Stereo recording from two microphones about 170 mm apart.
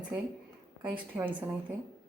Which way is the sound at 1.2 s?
10° right (ahead or behind).